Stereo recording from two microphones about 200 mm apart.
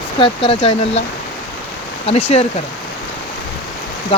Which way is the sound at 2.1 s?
30° left (ahead or behind).